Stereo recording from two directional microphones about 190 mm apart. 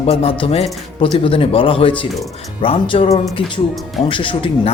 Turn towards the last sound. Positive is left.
turn(degrees=30)  # may be behind; listen again after turning